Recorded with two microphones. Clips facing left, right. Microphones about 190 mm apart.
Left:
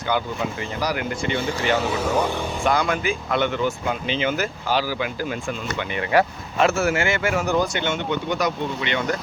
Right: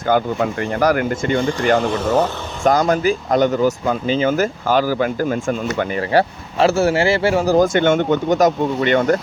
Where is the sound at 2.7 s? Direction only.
40° right (ahead or behind).